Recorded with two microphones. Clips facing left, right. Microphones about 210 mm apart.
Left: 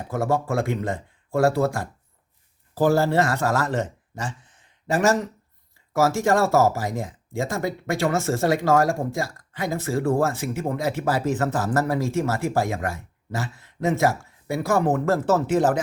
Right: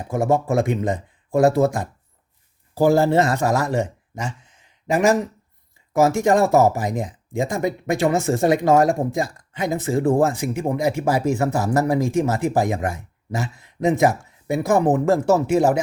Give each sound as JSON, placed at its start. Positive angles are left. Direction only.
{"t": 0.1, "sound": "speech", "side_deg": -20}